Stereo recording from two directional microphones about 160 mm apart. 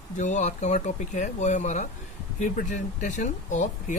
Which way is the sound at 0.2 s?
50° left (ahead or behind).